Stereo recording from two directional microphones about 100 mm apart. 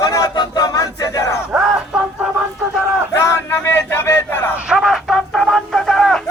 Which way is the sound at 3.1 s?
25° left (ahead or behind).